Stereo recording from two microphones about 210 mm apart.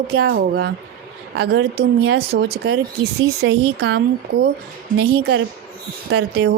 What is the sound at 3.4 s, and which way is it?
A woman's voice, 60° right (ahead or behind).